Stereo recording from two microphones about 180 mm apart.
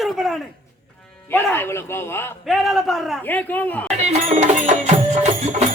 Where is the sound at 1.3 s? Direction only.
10° left (ahead or behind).